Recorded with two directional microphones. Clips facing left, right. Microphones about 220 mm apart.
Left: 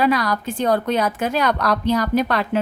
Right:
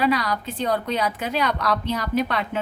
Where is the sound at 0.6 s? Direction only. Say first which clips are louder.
Left 5 dB; 50° left (ahead or behind).